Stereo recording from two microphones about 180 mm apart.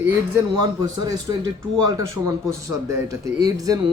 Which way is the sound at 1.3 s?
20° right (ahead or behind).